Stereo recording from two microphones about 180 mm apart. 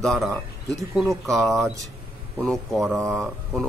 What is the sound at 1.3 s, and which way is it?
Speech, centre (ahead or behind).